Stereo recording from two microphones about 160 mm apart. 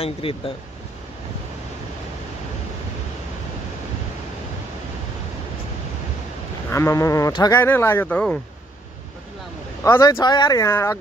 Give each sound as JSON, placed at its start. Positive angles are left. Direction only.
{"t": 0.0, "sound": "speech", "side_deg": 35}
{"t": 6.7, "sound": "speech", "side_deg": 15}
{"t": 9.8, "sound": "speech", "side_deg": 20}